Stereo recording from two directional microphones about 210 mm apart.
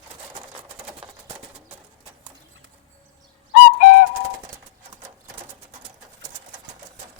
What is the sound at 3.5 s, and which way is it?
Bird, 40° left (ahead or behind).